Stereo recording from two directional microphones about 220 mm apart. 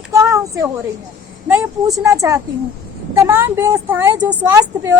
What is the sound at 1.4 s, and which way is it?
Speech, 5° right (ahead or behind).